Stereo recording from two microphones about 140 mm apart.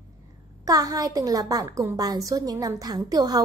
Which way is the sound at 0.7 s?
25° right (ahead or behind).